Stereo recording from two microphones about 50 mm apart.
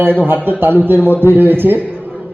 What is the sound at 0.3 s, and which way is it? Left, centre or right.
A man's voice, right.